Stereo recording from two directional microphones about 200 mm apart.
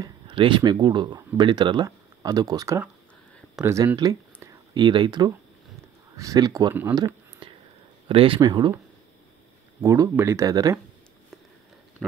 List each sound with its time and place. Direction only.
0.0 s speech: 25° right (ahead or behind)
6.7 s speech: 10° right (ahead or behind)
8.1 s speech: 25° right (ahead or behind)
9.8 s speech: 15° right (ahead or behind)